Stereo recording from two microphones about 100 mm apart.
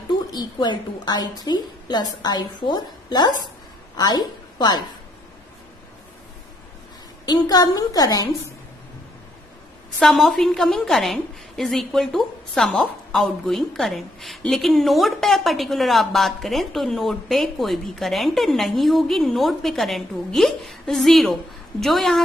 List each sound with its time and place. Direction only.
0.3 s a woman's voice: 45° left (ahead or behind)
7.2 s a woman's voice: 40° left (ahead or behind)
9.9 s a woman's voice: centre (ahead or behind)